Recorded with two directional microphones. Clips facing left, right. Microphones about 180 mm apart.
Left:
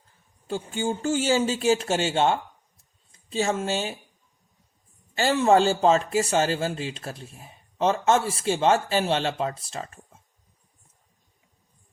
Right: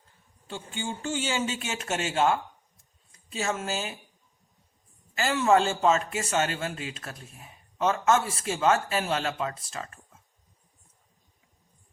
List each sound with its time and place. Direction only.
0.4 s speech: 40° left (ahead or behind)
5.1 s speech: 30° left (ahead or behind)